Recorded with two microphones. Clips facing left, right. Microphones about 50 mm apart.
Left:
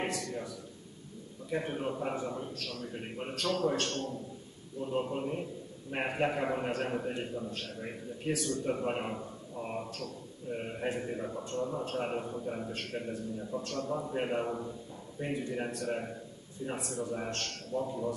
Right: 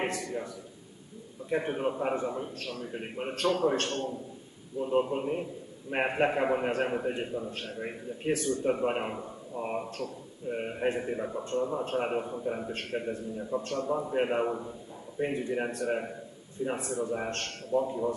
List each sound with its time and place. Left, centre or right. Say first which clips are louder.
0.0 s a man's voice: right 3 dB; centre
1.5 s a man's voice: right 4 dB; centre